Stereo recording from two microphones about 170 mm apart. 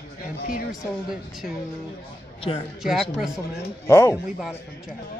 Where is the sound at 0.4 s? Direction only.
60° left (ahead or behind).